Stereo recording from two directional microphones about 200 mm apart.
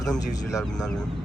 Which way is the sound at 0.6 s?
Centre (ahead or behind).